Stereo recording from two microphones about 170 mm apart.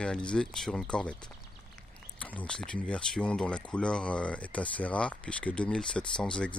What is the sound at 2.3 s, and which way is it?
Speech, 5° left (ahead or behind).